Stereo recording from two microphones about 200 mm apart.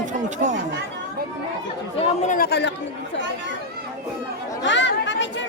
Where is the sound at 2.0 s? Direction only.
35° left (ahead or behind); by 2.7 s 55° left (ahead or behind).